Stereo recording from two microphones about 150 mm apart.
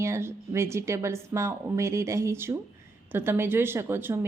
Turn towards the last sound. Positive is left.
turn(degrees=-15)  # may be behind; listen again after turning